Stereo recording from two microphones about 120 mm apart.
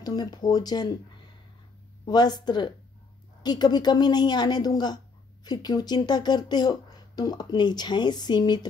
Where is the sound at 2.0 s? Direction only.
35° left (ahead or behind).